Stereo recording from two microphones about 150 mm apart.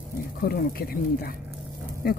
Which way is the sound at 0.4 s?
80° left.